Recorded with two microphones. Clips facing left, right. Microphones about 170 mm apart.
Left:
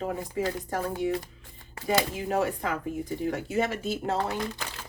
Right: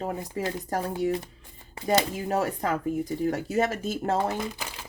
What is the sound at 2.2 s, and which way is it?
Speech, 40° right (ahead or behind).